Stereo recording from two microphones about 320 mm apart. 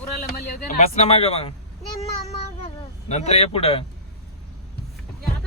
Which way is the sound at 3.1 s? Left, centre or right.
Centre.